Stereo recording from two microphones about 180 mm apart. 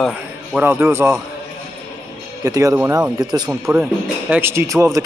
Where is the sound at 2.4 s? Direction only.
15° right (ahead or behind).